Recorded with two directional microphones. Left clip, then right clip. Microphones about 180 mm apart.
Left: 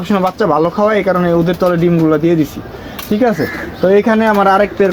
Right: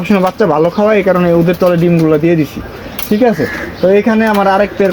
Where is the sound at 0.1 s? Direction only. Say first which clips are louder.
Right 2 dB; 30° right (ahead or behind).